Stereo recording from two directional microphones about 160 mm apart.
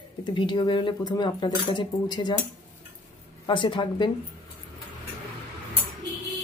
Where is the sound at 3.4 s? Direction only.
30° left (ahead or behind).